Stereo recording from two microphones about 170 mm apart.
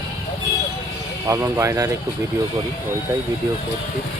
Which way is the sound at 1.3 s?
15° right (ahead or behind).